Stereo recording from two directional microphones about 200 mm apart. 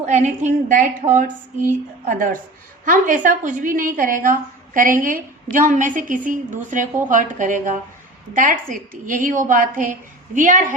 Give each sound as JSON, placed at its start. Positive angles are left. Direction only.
{"t": 0.0, "sound": "a woman's voice", "side_deg": -35}
{"t": 2.0, "sound": "a woman's voice", "side_deg": -40}